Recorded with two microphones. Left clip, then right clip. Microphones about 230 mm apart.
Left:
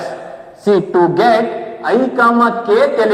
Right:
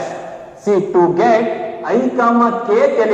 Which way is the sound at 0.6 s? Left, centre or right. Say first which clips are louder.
Left 1 dB; left.